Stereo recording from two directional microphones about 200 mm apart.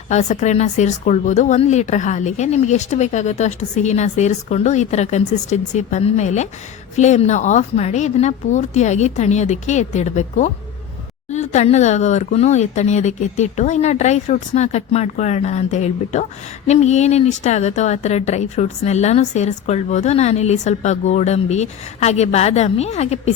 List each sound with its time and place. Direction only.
0.1 s speech: 35° left (ahead or behind)